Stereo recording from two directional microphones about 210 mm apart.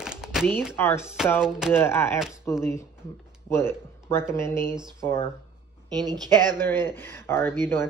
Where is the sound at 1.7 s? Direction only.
10° left (ahead or behind).